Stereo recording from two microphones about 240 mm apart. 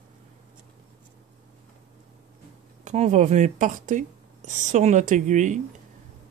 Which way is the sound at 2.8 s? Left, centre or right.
Right.